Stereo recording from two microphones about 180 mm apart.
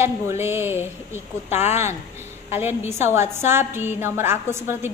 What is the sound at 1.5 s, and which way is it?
Speech, 40° left (ahead or behind).